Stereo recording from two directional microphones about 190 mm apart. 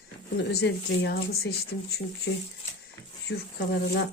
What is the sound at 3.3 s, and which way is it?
Speech, 65° left (ahead or behind).